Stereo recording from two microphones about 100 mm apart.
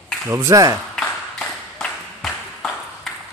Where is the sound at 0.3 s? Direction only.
30° right (ahead or behind).